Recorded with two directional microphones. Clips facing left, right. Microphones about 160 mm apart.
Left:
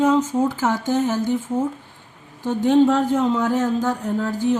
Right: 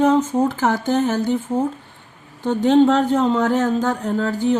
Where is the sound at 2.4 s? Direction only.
70° right (ahead or behind).